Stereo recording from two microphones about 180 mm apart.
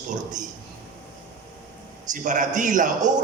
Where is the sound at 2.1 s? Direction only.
45° right (ahead or behind).